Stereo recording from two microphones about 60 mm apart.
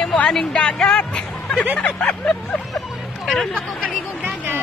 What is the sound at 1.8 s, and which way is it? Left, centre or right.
Vehicle, left.